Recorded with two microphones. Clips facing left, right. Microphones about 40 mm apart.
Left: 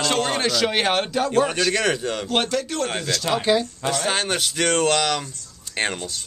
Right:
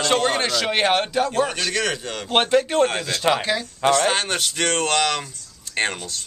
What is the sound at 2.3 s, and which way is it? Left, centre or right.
Speech, right.